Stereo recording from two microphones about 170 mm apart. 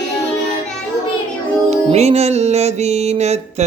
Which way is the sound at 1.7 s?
40° right (ahead or behind).